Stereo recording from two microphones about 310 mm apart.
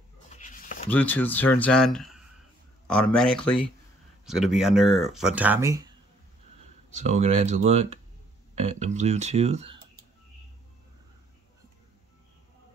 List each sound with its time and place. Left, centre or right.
0.3 s a sound: left
0.8 s speech: centre
7.0 s speech: right